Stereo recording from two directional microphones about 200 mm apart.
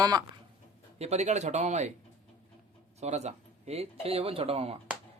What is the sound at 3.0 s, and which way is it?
Speech, 35° right (ahead or behind).